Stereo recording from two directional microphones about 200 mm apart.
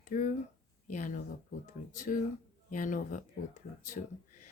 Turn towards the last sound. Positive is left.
turn(degrees=40)  # may be behind; listen again after turning